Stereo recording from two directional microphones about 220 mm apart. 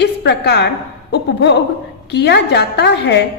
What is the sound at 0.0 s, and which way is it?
A woman's voice, 50° left (ahead or behind).